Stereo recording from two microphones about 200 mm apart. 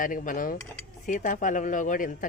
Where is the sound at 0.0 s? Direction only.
40° left (ahead or behind).